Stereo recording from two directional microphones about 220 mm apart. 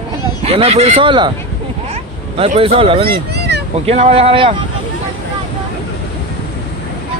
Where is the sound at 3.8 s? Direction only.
30° right (ahead or behind).